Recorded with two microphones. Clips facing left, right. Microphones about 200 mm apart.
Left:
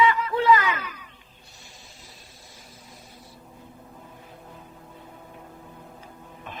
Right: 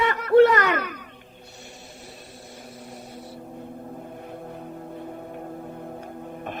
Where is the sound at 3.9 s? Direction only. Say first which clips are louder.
Right 9 dB; 55° right (ahead or behind).